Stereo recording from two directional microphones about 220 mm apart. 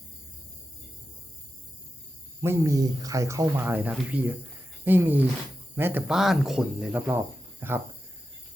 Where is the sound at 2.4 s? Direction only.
15° right (ahead or behind).